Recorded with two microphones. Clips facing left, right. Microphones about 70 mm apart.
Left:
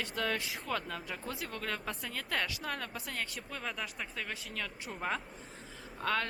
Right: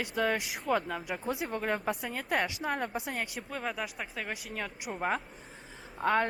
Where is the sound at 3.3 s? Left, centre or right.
Centre.